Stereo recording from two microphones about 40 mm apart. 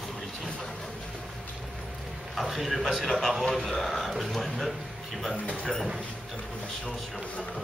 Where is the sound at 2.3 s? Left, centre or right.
Centre.